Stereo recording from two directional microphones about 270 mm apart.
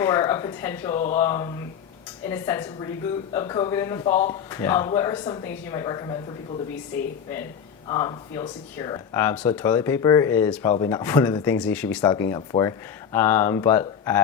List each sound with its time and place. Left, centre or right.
0.0 s a woman's voice: centre
7.9 s speech: centre